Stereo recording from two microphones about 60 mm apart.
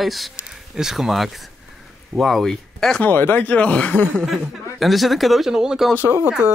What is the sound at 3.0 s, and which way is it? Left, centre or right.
Speech, left.